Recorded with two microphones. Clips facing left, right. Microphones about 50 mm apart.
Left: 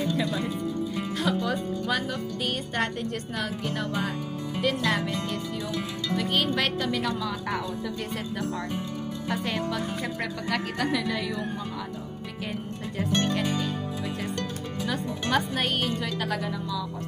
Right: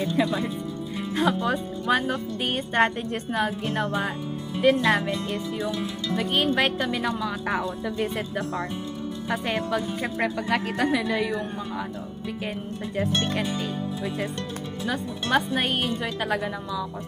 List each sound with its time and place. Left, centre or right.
0.0 s speech: right
12.9 s speech: centre
14.9 s speech: centre